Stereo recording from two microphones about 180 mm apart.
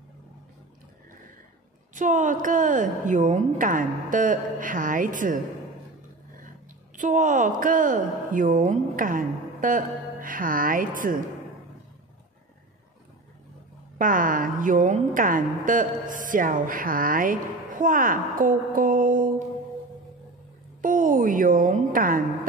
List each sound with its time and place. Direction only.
2.0 s a woman's voice: 45° right (ahead or behind)
7.0 s a woman's voice: 45° right (ahead or behind)
13.9 s a woman's voice: 50° right (ahead or behind)
20.8 s a woman's voice: 45° right (ahead or behind)